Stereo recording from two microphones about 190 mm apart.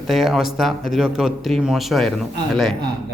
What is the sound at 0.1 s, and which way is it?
Speech, centre (ahead or behind).